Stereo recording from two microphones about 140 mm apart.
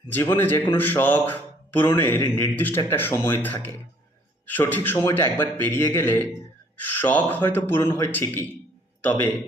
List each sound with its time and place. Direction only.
0.1 s speech: 15° left (ahead or behind)